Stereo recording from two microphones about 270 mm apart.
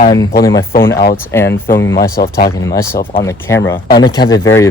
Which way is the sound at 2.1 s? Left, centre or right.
Left.